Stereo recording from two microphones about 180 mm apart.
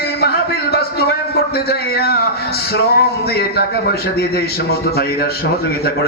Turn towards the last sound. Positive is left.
turn(degrees=60)  # may be behind; listen again after turning